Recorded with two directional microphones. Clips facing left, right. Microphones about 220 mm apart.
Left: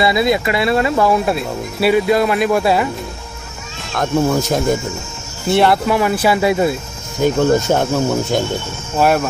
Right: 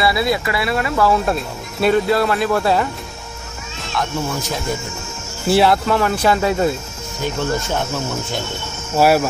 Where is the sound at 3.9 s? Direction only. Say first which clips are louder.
Left 7 dB; 45° left (ahead or behind).